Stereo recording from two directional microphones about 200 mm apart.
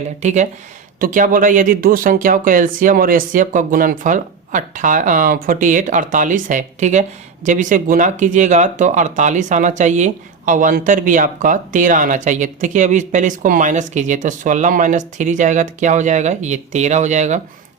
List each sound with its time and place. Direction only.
0.2 s speech: 35° right (ahead or behind)